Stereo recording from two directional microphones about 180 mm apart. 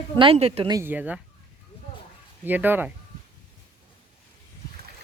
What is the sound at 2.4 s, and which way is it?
Speech, 10° right (ahead or behind).